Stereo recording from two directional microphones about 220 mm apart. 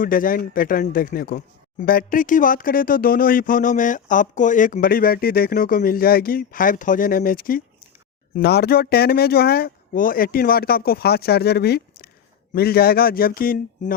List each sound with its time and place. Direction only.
0.0 s speech: 40° left (ahead or behind)